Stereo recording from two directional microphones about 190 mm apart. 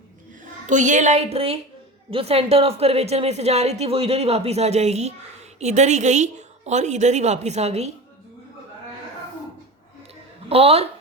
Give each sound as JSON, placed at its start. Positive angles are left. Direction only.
{"t": 0.4, "sound": "a woman's voice", "side_deg": -40}
{"t": 10.5, "sound": "a woman's voice", "side_deg": -30}